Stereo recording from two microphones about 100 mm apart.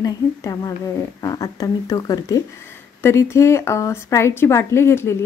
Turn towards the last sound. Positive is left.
turn(degrees=25)  # may be behind; listen again after turning